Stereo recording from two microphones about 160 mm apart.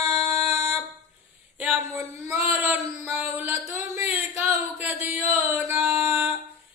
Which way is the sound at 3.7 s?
15° right (ahead or behind).